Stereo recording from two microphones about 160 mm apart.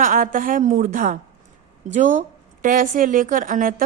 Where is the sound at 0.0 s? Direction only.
60° right (ahead or behind).